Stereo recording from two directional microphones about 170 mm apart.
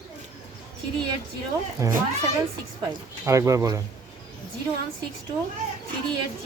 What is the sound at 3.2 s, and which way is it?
Speech, 15° right (ahead or behind).